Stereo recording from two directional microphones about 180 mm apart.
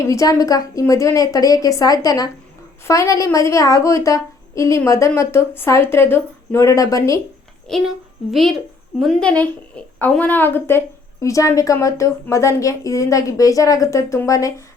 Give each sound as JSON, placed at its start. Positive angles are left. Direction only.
{"t": 0.0, "sound": "a woman's voice", "side_deg": 15}
{"t": 8.3, "sound": "a woman's voice", "side_deg": 0}